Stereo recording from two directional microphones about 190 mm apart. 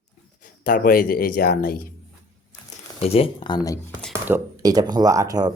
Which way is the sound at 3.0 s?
30° left (ahead or behind).